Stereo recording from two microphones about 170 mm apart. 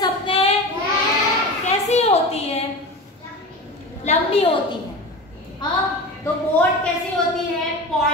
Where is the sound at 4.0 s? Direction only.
40° left (ahead or behind).